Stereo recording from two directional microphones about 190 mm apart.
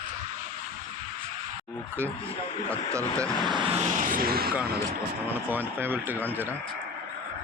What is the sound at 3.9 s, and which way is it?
Speech, 45° right (ahead or behind).